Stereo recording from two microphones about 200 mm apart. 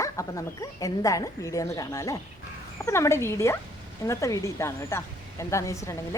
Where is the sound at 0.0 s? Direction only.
15° left (ahead or behind).